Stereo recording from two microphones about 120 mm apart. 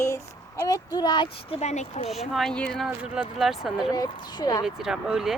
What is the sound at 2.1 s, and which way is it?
Speech, centre (ahead or behind).